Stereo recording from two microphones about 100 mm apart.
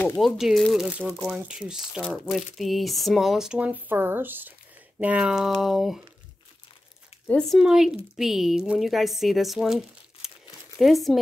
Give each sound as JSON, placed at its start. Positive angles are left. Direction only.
{"t": 0.2, "sound": "speech", "side_deg": 0}
{"t": 2.0, "sound": "speech", "side_deg": 0}
{"t": 7.2, "sound": "speech", "side_deg": 5}